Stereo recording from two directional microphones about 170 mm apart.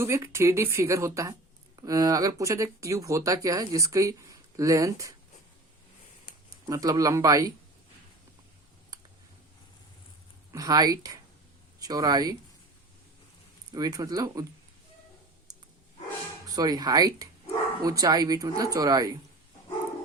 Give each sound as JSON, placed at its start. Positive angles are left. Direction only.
{"t": 0.0, "sound": "a woman's voice", "side_deg": -15}
{"t": 6.7, "sound": "speech", "side_deg": -20}
{"t": 10.5, "sound": "speech", "side_deg": -20}
{"t": 13.7, "sound": "speech", "side_deg": -20}
{"t": 16.5, "sound": "speech", "side_deg": -20}